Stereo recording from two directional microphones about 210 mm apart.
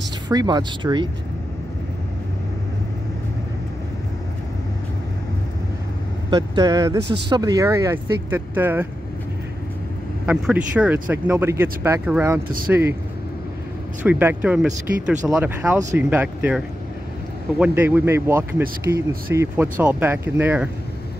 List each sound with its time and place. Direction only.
0.3 s speech: 20° right (ahead or behind)
6.3 s speech: 20° right (ahead or behind)
10.2 s speech: 5° right (ahead or behind)
14.0 s speech: 5° right (ahead or behind)